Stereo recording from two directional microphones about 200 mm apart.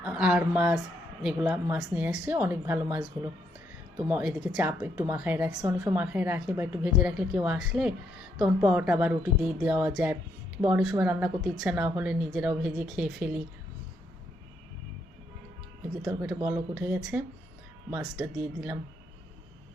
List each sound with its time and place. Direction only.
0.0 s speech: 5° right (ahead or behind)
16.0 s speech: 5° right (ahead or behind)